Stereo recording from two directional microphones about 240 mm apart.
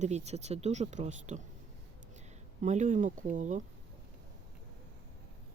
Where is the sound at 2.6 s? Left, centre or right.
Right.